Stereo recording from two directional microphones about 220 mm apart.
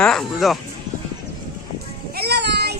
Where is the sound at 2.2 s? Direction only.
50° right (ahead or behind).